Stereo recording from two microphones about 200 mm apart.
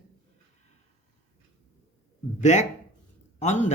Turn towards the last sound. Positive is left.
turn(degrees=35)  # may be behind; listen again after turning